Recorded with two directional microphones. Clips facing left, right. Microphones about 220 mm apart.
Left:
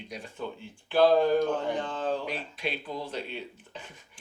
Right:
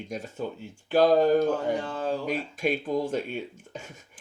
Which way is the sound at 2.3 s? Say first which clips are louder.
Right 7 dB; 45° right (ahead or behind).